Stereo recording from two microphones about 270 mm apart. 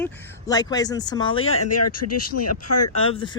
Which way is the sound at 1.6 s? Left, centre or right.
Left.